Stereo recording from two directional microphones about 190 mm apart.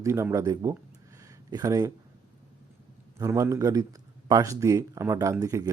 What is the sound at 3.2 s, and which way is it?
A man's voice, 15° right (ahead or behind).